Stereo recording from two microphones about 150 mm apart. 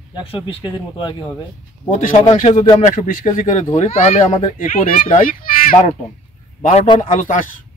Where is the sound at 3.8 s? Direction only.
45° left (ahead or behind).